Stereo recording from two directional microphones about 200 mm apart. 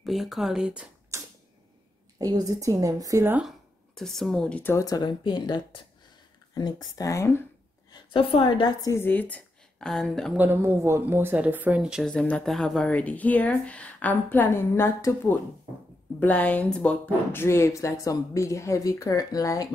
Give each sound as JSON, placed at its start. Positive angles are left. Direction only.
{"t": 0.0, "sound": "speech", "side_deg": 0}
{"t": 2.1, "sound": "a woman's voice", "side_deg": -20}
{"t": 7.9, "sound": "a woman's voice", "side_deg": 25}